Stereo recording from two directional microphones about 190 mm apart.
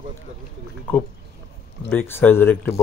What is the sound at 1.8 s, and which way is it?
Speech, 10° left (ahead or behind).